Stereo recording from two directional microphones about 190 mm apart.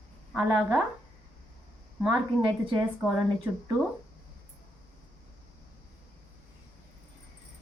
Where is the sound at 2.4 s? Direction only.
25° right (ahead or behind).